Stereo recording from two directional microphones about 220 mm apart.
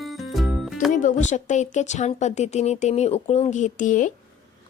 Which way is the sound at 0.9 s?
35° left (ahead or behind).